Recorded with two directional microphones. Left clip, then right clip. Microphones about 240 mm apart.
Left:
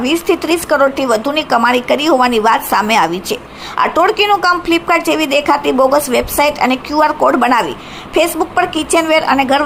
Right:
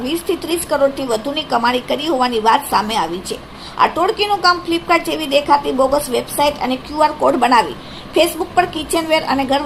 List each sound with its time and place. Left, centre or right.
0.0 s a woman's voice: centre